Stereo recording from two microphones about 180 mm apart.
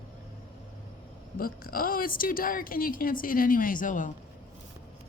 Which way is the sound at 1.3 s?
55° left (ahead or behind).